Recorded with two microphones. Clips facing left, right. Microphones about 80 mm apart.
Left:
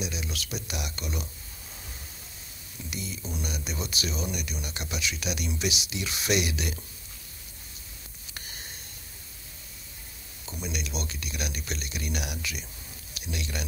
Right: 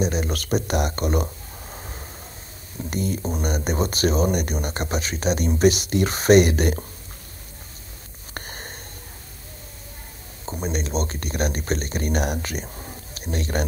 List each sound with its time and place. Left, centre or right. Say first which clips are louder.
0.0 s speech: right 11 dB; right
8.4 s a sound: right 9 dB; right
10.4 s speech: right 9 dB; right